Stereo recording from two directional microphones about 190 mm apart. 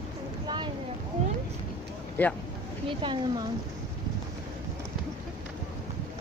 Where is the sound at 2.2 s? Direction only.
10° left (ahead or behind).